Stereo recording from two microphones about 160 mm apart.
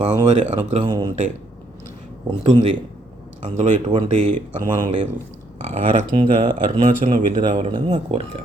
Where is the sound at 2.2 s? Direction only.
40° right (ahead or behind).